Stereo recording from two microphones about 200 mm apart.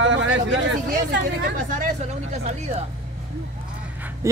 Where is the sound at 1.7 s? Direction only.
35° right (ahead or behind).